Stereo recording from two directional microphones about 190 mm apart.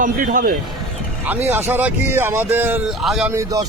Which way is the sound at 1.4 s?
10° right (ahead or behind).